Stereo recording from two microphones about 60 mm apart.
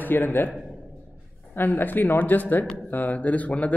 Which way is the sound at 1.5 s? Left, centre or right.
Left.